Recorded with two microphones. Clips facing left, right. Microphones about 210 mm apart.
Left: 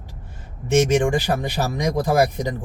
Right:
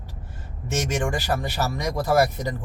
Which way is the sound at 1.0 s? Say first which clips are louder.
Left 5 dB; 15° left (ahead or behind).